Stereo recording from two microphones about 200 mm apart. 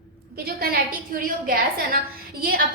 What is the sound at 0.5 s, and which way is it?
A woman's voice, 45° right (ahead or behind).